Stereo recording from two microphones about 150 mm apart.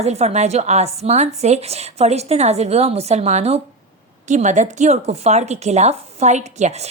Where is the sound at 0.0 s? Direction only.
45° right (ahead or behind).